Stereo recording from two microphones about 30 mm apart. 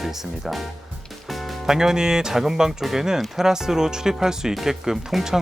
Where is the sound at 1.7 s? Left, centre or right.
Centre.